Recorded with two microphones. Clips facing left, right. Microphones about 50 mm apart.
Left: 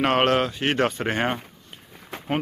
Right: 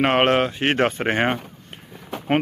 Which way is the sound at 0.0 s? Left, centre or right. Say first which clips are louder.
Right 2 dB; right.